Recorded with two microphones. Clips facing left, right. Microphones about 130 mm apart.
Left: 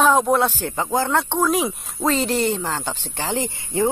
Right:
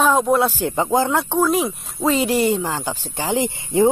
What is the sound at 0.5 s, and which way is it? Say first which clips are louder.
Speech: right 4 dB; 15° right (ahead or behind).